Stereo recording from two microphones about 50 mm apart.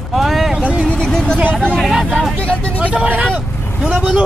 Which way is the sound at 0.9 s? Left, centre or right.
Centre.